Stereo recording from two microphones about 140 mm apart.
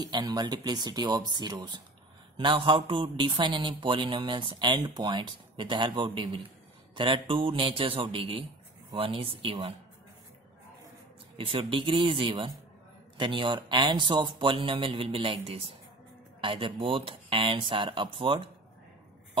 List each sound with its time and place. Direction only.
0.0 s a man's voice: 30° right (ahead or behind)
11.3 s a man's voice: 40° right (ahead or behind)